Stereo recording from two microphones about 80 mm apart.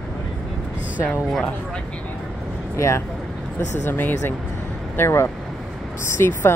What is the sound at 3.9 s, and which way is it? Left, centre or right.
Speech, left.